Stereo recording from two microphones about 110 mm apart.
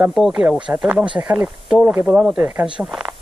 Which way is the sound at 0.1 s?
5° right (ahead or behind).